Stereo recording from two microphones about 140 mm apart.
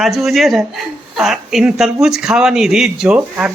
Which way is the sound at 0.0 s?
Centre (ahead or behind).